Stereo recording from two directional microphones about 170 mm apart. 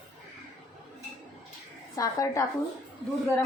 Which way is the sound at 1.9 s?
20° left (ahead or behind).